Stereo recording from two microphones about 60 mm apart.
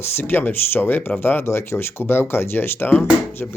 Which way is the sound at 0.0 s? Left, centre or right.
Left.